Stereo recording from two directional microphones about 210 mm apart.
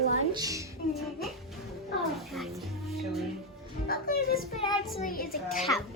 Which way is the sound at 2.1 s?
Centre (ahead or behind).